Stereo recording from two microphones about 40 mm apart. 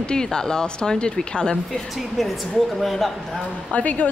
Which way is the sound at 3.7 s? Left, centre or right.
Left.